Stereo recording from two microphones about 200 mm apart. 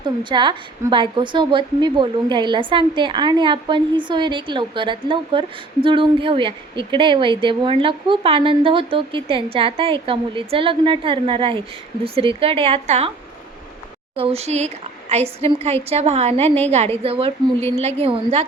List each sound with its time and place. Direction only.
0.0 s a woman's voice: 25° right (ahead or behind)
14.2 s a woman's voice: 30° right (ahead or behind)